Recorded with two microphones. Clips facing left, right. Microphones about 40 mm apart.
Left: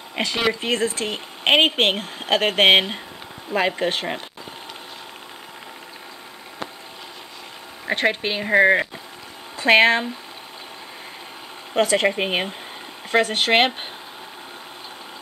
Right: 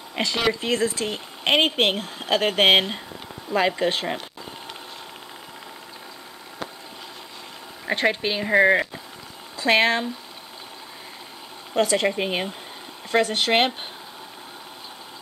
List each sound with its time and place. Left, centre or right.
0.1 s speech: left
3.5 s speech: left
3.8 s speech: centre
7.8 s a sound: centre
8.1 s speech: left
9.6 s speech: left
11.7 s speech: left